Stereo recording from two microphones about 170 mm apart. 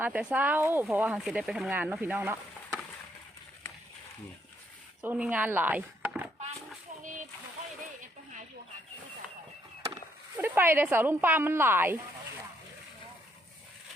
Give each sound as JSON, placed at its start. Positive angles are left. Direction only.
{"t": 0.0, "sound": "speech", "side_deg": -10}
{"t": 5.0, "sound": "speech", "side_deg": -5}
{"t": 7.0, "sound": "splash", "side_deg": -50}
{"t": 10.3, "sound": "speech", "side_deg": -10}